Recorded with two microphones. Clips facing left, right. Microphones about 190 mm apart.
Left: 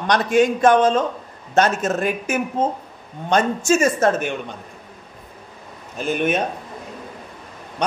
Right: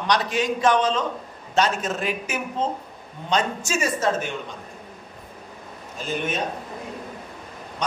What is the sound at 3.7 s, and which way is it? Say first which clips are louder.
Speech: left 7 dB; 50° left (ahead or behind).